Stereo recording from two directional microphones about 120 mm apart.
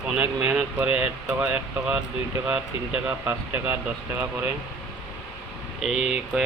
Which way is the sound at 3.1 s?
15° right (ahead or behind).